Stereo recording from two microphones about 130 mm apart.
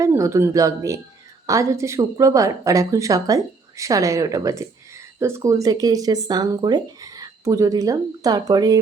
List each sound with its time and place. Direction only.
0.0 s speech: 20° right (ahead or behind)